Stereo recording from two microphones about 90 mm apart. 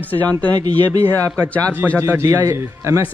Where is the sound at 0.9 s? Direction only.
40° right (ahead or behind).